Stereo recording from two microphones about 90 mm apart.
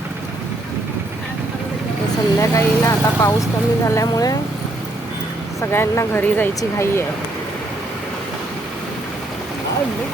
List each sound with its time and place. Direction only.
2.4 s speech: 35° left (ahead or behind)
5.5 s speech: 30° left (ahead or behind)
6.6 s speech: 30° left (ahead or behind)